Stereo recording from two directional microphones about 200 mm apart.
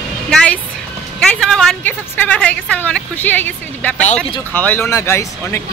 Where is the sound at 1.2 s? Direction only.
Centre (ahead or behind).